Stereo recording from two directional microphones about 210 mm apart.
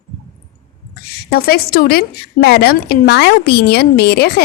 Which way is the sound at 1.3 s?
45° left (ahead or behind).